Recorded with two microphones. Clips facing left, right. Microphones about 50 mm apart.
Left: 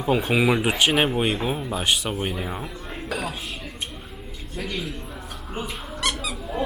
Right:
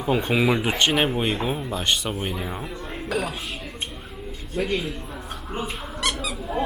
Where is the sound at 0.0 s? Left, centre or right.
Centre.